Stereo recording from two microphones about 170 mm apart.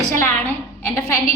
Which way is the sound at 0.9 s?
20° left (ahead or behind).